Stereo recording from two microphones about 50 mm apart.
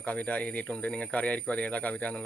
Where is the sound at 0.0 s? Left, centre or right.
Left.